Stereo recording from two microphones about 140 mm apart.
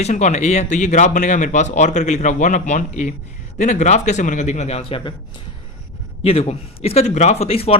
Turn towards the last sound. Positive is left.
turn(degrees=45)  # may be behind; listen again after turning